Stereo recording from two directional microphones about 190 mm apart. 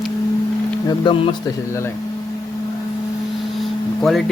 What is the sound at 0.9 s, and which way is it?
Speech, 25° left (ahead or behind).